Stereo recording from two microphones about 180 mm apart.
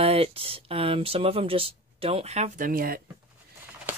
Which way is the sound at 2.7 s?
55° right (ahead or behind).